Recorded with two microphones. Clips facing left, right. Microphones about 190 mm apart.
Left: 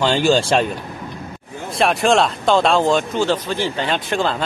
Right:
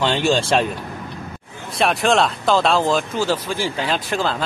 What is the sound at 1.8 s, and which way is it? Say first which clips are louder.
Speech: left 2 dB; centre (ahead or behind).